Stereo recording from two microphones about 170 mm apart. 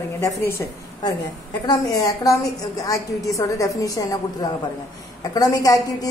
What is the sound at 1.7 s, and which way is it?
A woman's voice, 20° left (ahead or behind).